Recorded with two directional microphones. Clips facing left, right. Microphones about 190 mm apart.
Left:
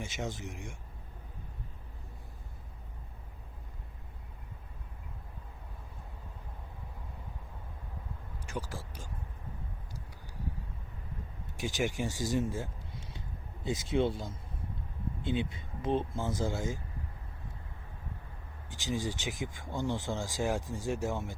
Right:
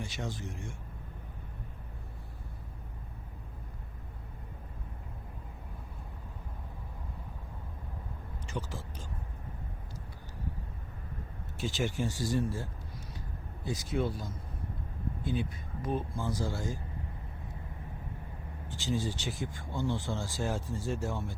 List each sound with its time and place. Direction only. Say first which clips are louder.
0.0 s speech: left 1 dB; 20° left (ahead or behind)
8.4 s speech: even; 10° left (ahead or behind)
11.5 s speech: even; 15° left (ahead or behind)
13.7 s speech: left 3 dB; 25° left (ahead or behind)
18.7 s speech: right 1 dB; 15° left (ahead or behind)